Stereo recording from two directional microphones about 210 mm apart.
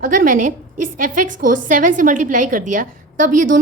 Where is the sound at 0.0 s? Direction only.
40° right (ahead or behind).